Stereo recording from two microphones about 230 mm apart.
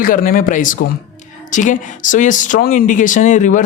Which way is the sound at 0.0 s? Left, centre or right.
Left.